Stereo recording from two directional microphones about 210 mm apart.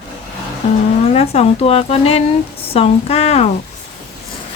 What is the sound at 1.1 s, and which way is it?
Speech, 30° left (ahead or behind).